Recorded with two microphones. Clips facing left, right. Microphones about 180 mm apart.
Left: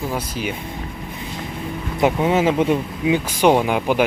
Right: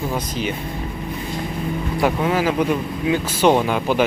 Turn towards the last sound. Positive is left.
turn(degrees=15)  # may be behind; listen again after turning